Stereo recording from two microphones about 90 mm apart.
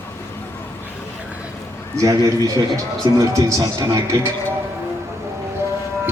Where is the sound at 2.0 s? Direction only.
40° right (ahead or behind).